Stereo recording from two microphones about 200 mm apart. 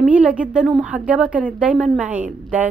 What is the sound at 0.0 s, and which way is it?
A woman's voice, 5° right (ahead or behind).